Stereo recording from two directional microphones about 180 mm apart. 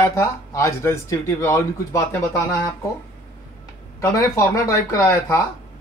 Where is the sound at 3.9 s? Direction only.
15° left (ahead or behind).